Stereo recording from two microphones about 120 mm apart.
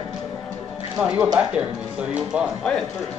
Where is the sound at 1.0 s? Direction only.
15° right (ahead or behind).